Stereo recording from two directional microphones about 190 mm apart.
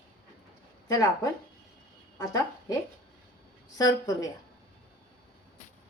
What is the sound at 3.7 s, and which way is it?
Speech, 20° left (ahead or behind).